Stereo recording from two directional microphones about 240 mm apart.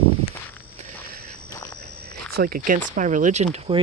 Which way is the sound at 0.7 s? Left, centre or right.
Right.